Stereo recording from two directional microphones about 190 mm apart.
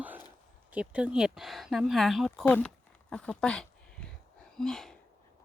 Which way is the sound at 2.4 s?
10° left (ahead or behind).